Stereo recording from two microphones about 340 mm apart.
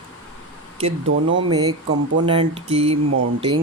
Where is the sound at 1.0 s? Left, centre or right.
Right.